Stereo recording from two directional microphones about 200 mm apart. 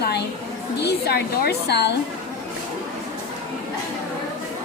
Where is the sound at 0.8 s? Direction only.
55° left (ahead or behind).